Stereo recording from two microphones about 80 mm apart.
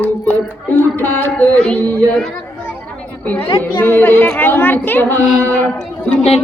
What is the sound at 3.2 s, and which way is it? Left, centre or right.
Speech, centre.